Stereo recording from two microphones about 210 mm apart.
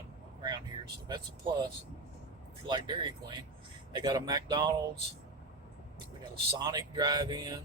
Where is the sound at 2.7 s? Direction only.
20° right (ahead or behind).